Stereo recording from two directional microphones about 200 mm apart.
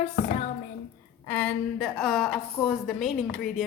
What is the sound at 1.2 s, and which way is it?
A woman's voice, 5° left (ahead or behind).